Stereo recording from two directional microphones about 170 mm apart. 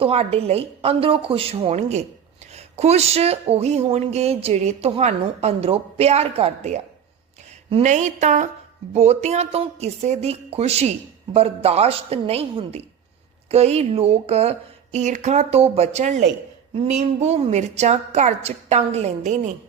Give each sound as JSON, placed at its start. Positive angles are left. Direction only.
{"t": 0.0, "sound": "a woman's voice", "side_deg": -35}